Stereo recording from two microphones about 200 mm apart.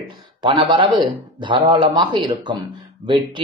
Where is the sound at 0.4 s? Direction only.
25° right (ahead or behind).